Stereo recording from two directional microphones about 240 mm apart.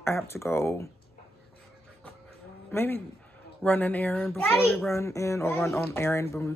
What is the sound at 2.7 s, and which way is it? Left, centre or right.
A woman's voice, centre.